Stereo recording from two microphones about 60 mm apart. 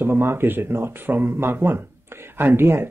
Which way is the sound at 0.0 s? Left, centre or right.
Right.